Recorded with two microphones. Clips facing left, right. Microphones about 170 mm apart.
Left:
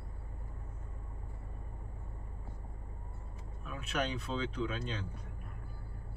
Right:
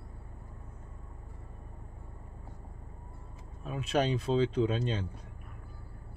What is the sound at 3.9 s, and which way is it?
Speech, 90° right.